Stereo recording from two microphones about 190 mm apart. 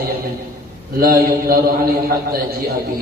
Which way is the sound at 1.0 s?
50° right (ahead or behind).